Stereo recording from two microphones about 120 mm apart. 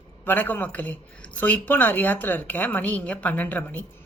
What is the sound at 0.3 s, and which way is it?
Speech, 15° left (ahead or behind).